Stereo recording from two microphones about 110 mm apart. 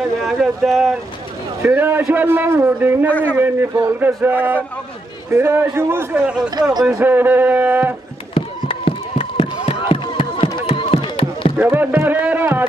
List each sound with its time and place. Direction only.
0.2 s speech: centre (ahead or behind)
1.6 s a man's voice: 20° right (ahead or behind)
3.1 s a man's voice: 15° left (ahead or behind)
3.8 s a man's voice: 20° right (ahead or behind)
6.1 s speech: 10° right (ahead or behind)
6.7 s speech: 40° right (ahead or behind)
7.0 s speech: 20° right (ahead or behind)
8.4 s a sound: 60° left (ahead or behind)
11.5 s speech: 15° right (ahead or behind)